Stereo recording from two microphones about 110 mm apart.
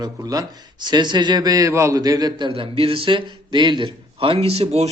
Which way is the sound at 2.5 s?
60° right (ahead or behind).